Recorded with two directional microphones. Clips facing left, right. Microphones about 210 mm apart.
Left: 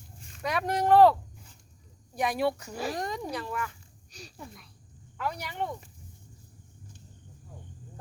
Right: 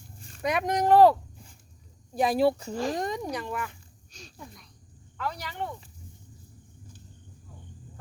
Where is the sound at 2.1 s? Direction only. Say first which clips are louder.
Right 5 dB; 30° right (ahead or behind).